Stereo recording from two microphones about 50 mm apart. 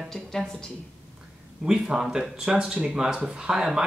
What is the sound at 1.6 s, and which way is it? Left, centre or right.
Speech, centre.